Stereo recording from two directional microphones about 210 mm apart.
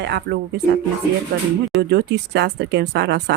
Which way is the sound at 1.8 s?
50° right (ahead or behind).